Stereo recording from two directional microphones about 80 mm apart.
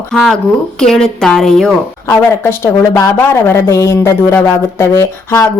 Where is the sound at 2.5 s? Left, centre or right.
Left.